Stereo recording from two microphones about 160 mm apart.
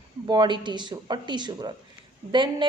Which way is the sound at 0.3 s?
30° right (ahead or behind).